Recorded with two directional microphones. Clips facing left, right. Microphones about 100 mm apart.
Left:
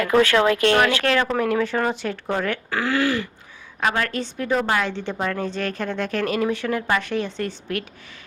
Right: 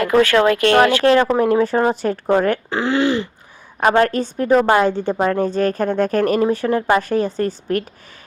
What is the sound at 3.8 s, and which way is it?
A woman's voice, 35° right (ahead or behind).